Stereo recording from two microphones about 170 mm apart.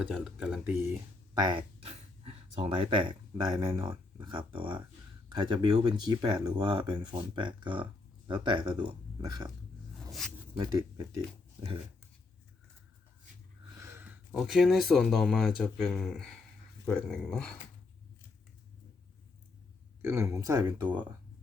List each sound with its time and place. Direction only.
0.0 s speech: 5° right (ahead or behind)
1.3 s speech: 25° right (ahead or behind)
1.8 s speech: 35° right (ahead or behind)
10.1 s speech: centre (ahead or behind)
10.7 s speech: 25° right (ahead or behind)
13.7 s a sound: 15° right (ahead or behind)
14.3 s speech: centre (ahead or behind)
20.0 s speech: 15° right (ahead or behind)